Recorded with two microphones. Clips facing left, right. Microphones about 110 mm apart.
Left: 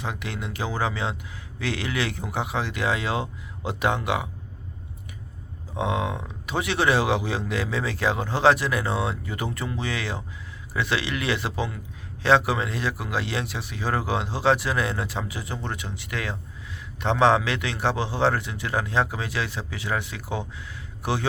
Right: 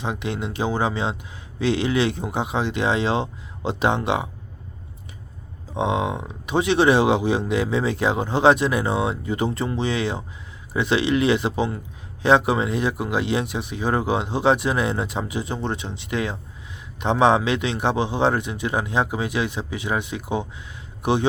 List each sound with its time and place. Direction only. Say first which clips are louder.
0.0 s speech: right 5 dB; 20° right (ahead or behind)
5.7 s speech: right 4 dB; 20° right (ahead or behind)